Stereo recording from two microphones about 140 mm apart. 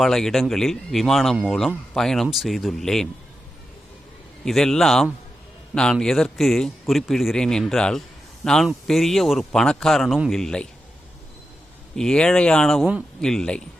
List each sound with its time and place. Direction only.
0.0 s a man's voice: centre (ahead or behind)
4.4 s a man's voice: centre (ahead or behind)
11.9 s a man's voice: 5° left (ahead or behind)